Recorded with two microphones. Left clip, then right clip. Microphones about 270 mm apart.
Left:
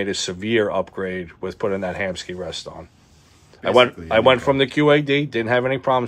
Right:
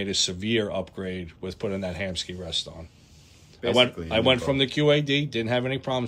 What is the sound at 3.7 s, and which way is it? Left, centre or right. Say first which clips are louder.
Speech: left 6 dB; left.